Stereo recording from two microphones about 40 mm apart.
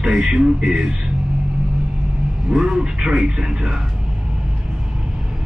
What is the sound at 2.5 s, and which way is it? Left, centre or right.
A man's voice, centre.